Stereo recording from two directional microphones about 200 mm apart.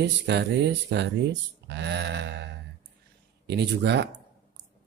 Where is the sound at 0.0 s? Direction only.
60° right (ahead or behind).